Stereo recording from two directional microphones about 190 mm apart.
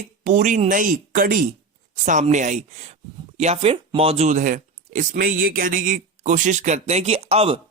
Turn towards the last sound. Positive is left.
turn(degrees=-30)  # may be behind; listen again after turning